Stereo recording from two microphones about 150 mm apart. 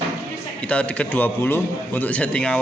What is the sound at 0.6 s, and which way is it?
A man's voice, 10° left (ahead or behind).